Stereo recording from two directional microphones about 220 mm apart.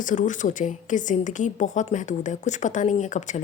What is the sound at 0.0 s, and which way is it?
A woman's voice, 35° left (ahead or behind).